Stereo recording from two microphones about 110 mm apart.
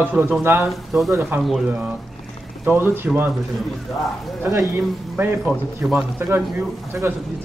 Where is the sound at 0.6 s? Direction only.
Centre (ahead or behind).